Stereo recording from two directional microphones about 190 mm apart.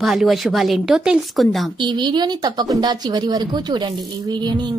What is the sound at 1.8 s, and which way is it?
A woman's voice, 25° right (ahead or behind).